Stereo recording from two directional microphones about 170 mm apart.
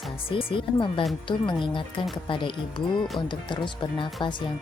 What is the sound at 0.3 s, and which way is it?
Speech, 30° left (ahead or behind).